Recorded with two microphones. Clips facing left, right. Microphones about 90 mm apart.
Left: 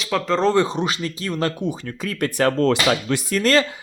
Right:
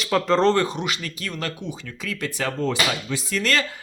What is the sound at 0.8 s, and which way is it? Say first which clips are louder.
Speech: left 5 dB; 35° left (ahead or behind).